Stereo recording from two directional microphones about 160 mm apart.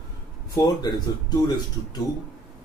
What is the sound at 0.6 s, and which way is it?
Speech, 25° left (ahead or behind).